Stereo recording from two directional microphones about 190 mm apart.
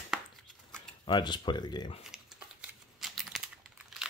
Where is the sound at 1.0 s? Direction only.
25° left (ahead or behind).